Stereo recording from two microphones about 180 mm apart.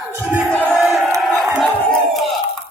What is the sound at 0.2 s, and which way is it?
Crowd, 5° right (ahead or behind).